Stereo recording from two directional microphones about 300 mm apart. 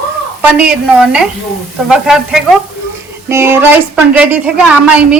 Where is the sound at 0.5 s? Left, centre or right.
Centre.